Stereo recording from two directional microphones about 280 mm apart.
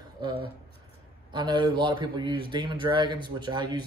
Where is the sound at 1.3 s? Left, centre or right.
Centre.